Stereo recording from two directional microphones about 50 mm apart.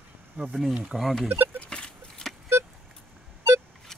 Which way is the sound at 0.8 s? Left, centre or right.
Centre.